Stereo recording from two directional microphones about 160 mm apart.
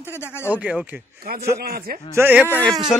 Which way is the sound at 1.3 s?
70° right (ahead or behind).